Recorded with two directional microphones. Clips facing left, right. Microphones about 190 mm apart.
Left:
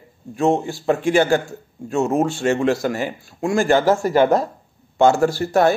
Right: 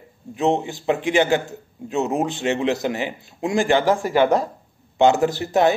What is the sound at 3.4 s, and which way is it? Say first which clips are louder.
Speech: left 2 dB; 20° right (ahead or behind).